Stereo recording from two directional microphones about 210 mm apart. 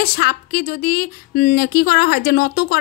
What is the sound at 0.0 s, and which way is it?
A woman's voice, 40° left (ahead or behind).